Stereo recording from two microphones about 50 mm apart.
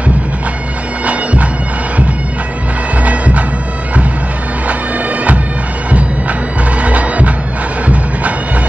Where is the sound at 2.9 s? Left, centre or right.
Right.